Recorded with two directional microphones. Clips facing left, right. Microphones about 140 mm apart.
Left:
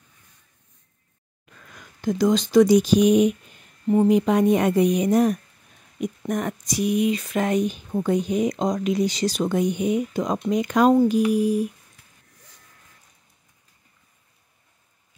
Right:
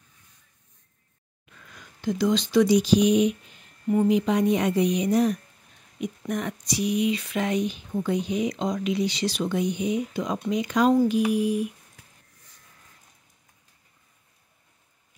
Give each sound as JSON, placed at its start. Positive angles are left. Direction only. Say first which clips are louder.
{"t": 1.8, "sound": "speech", "louder": "left 3 dB", "side_deg": 45}
{"t": 3.8, "sound": "speech", "louder": "left 3 dB", "side_deg": 25}
{"t": 4.1, "sound": "speech", "louder": "left 4 dB", "side_deg": 50}